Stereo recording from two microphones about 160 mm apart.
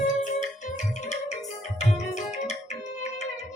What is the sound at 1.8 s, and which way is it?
Tabla, 45° left (ahead or behind).